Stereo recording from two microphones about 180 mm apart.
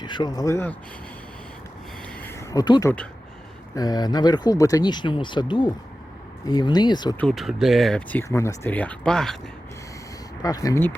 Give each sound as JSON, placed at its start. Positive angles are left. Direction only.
{"t": 0.0, "sound": "speech", "side_deg": 25}
{"t": 2.2, "sound": "a sound", "side_deg": 15}
{"t": 3.8, "sound": "speech", "side_deg": 20}
{"t": 7.2, "sound": "speech", "side_deg": 0}
{"t": 10.4, "sound": "speech", "side_deg": 20}